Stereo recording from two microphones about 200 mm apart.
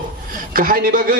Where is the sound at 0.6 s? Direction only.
45° right (ahead or behind).